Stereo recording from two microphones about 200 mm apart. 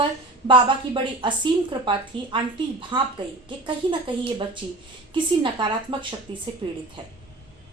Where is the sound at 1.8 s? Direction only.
25° right (ahead or behind).